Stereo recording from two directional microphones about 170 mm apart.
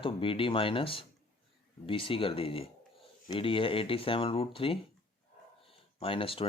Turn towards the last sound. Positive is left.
turn(degrees=30)  # may be behind; listen again after turning